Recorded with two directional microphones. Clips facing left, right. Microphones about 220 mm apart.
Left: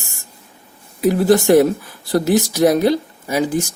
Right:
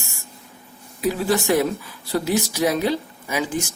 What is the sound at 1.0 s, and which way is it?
Speech, 45° left (ahead or behind).